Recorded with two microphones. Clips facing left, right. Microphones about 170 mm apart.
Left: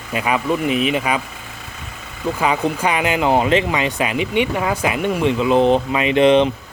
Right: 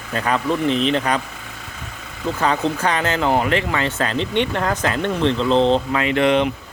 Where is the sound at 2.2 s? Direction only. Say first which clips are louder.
Left 1 dB; 10° left (ahead or behind).